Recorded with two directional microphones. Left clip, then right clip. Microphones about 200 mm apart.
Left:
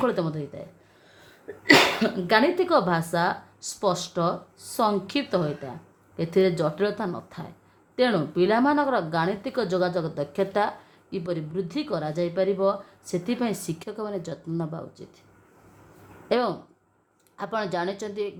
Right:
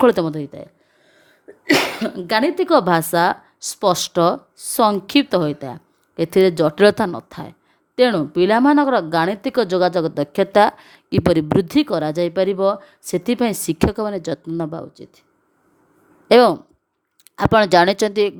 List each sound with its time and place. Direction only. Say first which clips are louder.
0.0 s speech: right 10 dB; 50° right (ahead or behind)
16.3 s speech: right 13 dB; 55° right (ahead or behind)